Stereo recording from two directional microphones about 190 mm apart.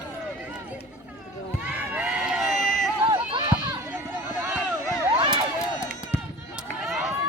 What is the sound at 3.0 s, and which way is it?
Run, 25° right (ahead or behind).